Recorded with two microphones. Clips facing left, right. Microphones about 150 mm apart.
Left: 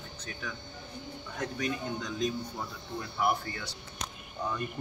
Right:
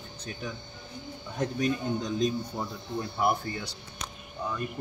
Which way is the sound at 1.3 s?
25° right (ahead or behind).